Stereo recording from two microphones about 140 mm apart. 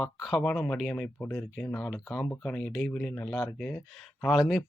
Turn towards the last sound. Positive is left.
turn(degrees=0)  # may be behind; listen again after turning